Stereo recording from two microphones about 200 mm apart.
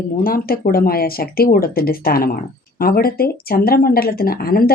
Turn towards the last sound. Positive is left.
turn(degrees=50)  # may be behind; listen again after turning